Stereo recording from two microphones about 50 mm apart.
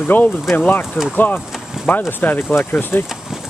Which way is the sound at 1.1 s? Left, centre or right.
Left.